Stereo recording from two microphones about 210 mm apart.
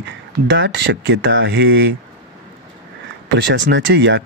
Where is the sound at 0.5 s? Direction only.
55° right (ahead or behind).